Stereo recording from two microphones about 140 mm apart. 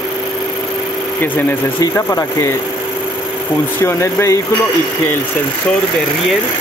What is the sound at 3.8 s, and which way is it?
Speech, 20° left (ahead or behind).